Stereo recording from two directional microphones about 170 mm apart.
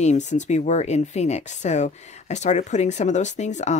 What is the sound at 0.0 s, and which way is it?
Speech, 45° left (ahead or behind).